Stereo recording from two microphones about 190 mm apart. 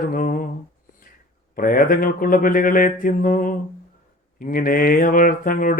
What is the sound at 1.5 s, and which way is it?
Mantra, 50° left (ahead or behind).